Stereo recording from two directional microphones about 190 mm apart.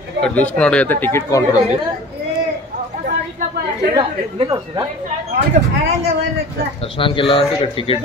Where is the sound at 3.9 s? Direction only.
20° right (ahead or behind).